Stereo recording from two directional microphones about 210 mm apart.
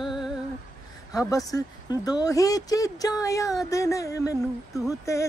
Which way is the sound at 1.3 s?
15° left (ahead or behind).